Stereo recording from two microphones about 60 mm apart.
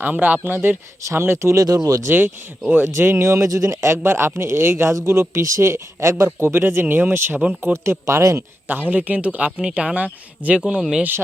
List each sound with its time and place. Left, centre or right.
0.0 s a man's voice: right
1.5 s speech: right
2.0 s a man's voice: right
3.0 s speech: right
3.8 s speech: right
8.9 s speech: right